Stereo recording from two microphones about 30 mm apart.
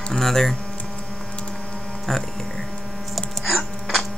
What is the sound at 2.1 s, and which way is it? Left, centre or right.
Speech, centre.